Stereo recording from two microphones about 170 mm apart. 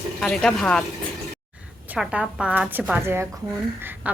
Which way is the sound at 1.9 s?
5° right (ahead or behind).